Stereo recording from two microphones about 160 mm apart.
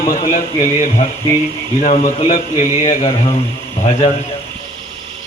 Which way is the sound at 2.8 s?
25° left (ahead or behind).